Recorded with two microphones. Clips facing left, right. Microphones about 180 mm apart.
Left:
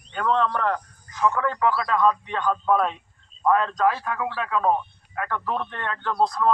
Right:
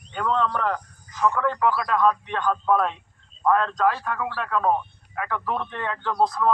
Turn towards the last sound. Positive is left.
turn(degrees=-5)  # may be behind; listen again after turning